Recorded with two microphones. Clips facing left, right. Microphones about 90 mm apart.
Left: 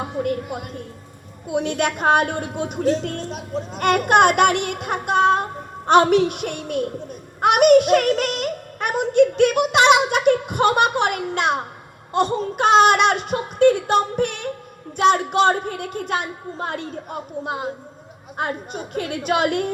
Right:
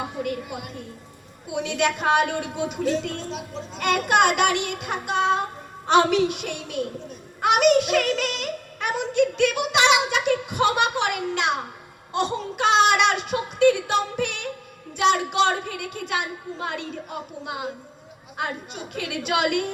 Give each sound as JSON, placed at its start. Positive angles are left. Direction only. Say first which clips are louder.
{"t": 0.2, "sound": "a woman's voice", "louder": "left 5 dB", "side_deg": 45}